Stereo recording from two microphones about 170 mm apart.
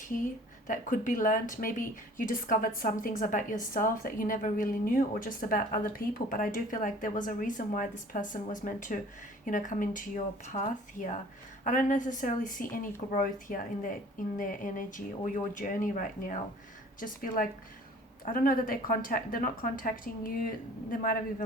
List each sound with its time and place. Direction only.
0.0 s a woman's voice: 50° left (ahead or behind)